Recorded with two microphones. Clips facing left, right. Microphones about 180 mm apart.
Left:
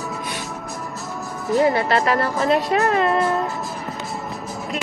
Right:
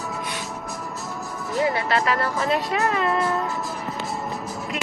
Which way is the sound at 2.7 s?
50° left (ahead or behind).